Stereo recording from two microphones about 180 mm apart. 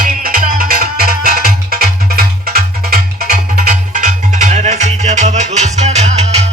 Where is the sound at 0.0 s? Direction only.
50° right (ahead or behind).